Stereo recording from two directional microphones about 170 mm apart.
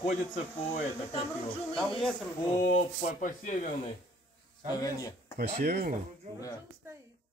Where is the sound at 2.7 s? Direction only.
50° left (ahead or behind).